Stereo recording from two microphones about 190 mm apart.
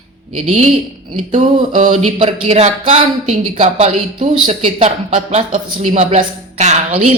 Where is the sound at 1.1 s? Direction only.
30° right (ahead or behind).